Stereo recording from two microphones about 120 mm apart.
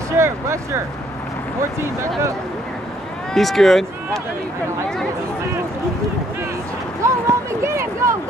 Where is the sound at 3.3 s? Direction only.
Centre (ahead or behind).